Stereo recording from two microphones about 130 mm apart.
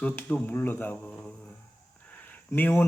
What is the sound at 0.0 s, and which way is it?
A man's voice, 15° left (ahead or behind).